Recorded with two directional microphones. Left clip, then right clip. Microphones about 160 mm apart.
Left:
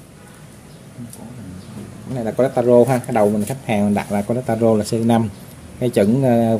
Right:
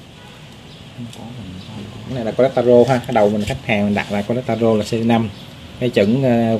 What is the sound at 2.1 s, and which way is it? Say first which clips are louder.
Speech: right 2 dB; 15° left (ahead or behind).